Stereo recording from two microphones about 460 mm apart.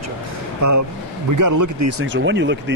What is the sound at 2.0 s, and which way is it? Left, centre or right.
Speech, right.